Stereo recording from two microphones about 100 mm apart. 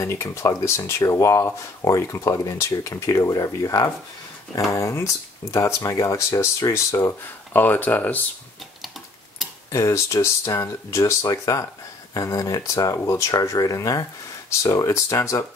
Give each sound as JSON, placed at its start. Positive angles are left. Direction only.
{"t": 0.0, "sound": "speech", "side_deg": 30}
{"t": 7.5, "sound": "speech", "side_deg": 20}
{"t": 9.7, "sound": "speech", "side_deg": 30}